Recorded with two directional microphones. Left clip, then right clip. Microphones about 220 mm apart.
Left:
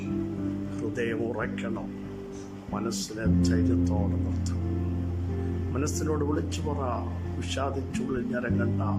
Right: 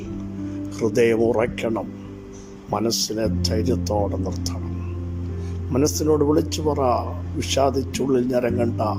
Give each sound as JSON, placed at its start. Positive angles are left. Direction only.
{"t": 0.8, "sound": "a man's voice", "side_deg": -25}
{"t": 6.0, "sound": "a man's voice", "side_deg": -20}